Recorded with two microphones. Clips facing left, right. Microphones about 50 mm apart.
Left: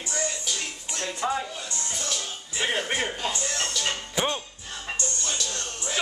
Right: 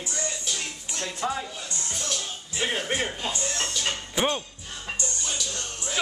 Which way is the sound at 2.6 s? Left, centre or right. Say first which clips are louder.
Left 1 dB; centre.